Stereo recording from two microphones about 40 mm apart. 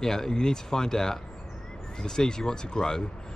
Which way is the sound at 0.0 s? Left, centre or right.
Centre.